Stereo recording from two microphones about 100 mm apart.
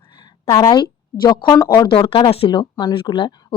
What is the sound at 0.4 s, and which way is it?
Speech, 30° left (ahead or behind).